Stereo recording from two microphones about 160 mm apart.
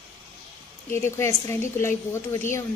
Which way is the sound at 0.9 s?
15° left (ahead or behind).